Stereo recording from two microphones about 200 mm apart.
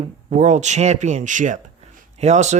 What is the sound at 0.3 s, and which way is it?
Speech, 35° right (ahead or behind).